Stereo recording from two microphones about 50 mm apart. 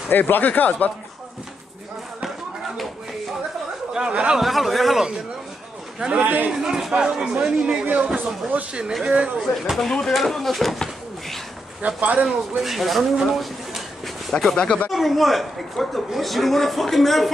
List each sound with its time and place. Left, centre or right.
0.1 s speech: left
3.9 s speech: centre
4.4 s a man's voice: centre
5.9 s a man's voice: centre
6.2 s a man's voice: right
6.6 s speech: centre
7.8 s a man's voice: right
9.0 s speech: centre
9.4 s a man's voice: centre
9.8 s speech: centre
11.8 s speech: right
12.3 s speech: centre
14.3 s speech: centre
14.9 s a man's voice: centre